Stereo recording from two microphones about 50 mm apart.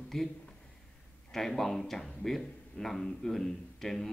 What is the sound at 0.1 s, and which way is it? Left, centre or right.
Speech, centre.